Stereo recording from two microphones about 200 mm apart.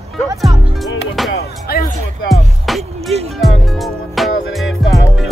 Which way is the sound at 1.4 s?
50° left (ahead or behind).